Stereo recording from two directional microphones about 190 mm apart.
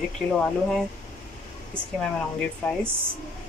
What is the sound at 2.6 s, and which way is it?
Speech, 10° left (ahead or behind).